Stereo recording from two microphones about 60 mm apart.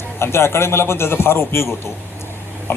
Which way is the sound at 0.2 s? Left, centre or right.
Left.